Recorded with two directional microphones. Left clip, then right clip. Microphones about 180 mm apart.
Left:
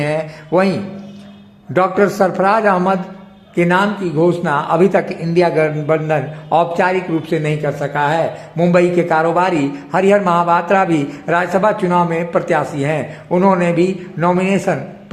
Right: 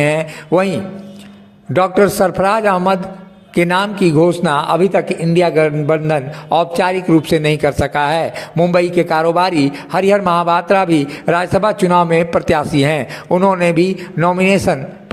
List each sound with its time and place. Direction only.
0.0 s a man's voice: 20° right (ahead or behind)